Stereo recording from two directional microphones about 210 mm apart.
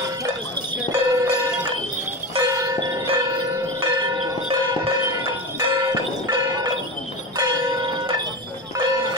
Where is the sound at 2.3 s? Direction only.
15° right (ahead or behind).